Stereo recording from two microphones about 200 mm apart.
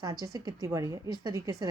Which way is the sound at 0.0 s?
15° right (ahead or behind).